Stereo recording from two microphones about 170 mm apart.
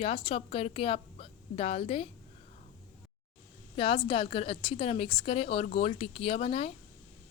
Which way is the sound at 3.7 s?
30° left (ahead or behind).